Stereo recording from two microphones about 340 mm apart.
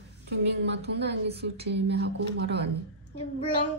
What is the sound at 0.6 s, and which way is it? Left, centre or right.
A woman's voice, right.